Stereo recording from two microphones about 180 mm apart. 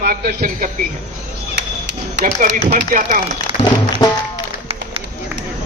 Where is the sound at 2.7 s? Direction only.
45° right (ahead or behind).